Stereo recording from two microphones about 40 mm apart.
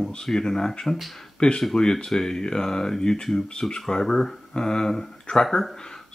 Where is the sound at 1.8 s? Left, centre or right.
Centre.